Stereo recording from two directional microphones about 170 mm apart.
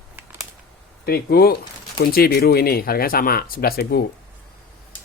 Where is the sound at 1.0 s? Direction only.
65° left (ahead or behind).